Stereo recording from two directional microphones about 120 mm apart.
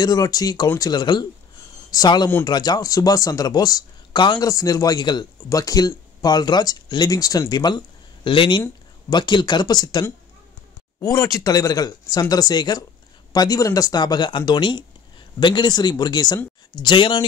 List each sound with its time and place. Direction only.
0.0 s speech: 30° left (ahead or behind)